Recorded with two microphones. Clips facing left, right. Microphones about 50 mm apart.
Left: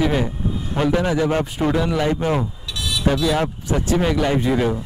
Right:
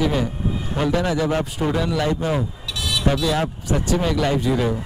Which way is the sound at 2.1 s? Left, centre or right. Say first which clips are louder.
Left 2 dB; left.